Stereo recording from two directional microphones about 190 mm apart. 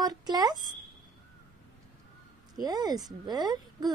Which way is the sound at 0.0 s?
20° right (ahead or behind).